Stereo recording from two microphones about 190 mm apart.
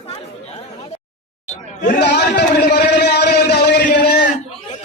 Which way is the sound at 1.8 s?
60° left (ahead or behind).